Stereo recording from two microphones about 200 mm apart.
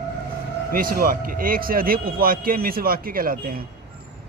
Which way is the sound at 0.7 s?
45° right (ahead or behind).